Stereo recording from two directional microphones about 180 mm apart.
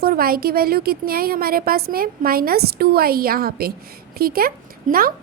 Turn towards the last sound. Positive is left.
turn(degrees=-55)  # may be behind; listen again after turning